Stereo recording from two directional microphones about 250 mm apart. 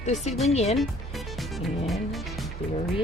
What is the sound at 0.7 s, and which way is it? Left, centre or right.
Music, centre.